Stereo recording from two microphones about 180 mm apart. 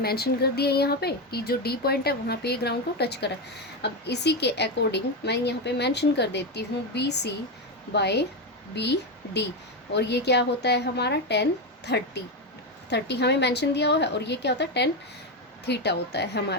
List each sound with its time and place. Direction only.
0.0 s a woman's voice: 60° left (ahead or behind)